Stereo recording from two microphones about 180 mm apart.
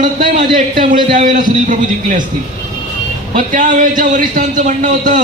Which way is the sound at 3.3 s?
45° right (ahead or behind).